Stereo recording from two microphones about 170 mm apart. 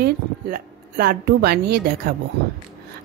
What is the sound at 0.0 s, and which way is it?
A woman's voice, 65° right (ahead or behind).